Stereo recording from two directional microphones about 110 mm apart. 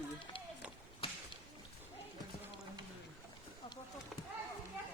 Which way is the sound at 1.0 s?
55° left (ahead or behind).